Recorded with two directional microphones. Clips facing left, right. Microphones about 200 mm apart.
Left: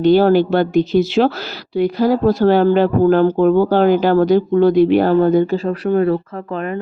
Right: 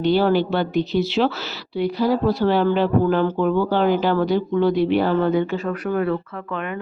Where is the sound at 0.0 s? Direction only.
45° left (ahead or behind).